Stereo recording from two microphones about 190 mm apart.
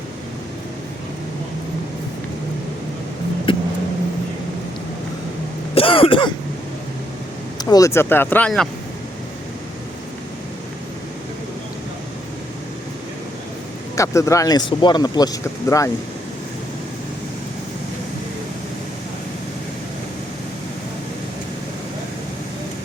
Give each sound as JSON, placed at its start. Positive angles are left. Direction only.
{"t": 3.5, "sound": "a sound", "side_deg": 25}
{"t": 5.7, "sound": "throat clearing", "side_deg": 30}
{"t": 7.6, "sound": "speech", "side_deg": 20}
{"t": 13.9, "sound": "speech", "side_deg": 15}